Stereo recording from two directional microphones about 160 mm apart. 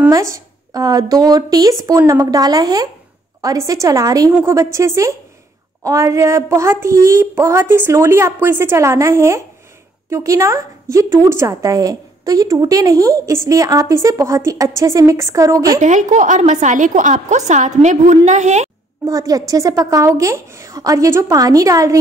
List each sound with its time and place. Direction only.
0.1 s a woman's voice: 20° right (ahead or behind)
15.8 s a woman's voice: 50° right (ahead or behind)
19.0 s a woman's voice: 20° right (ahead or behind)